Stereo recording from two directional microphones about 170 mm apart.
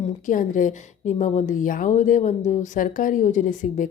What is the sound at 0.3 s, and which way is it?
A woman's voice, 50° left (ahead or behind).